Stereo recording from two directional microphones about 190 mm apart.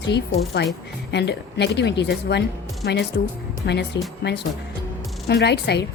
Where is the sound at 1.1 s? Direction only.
65° left (ahead or behind).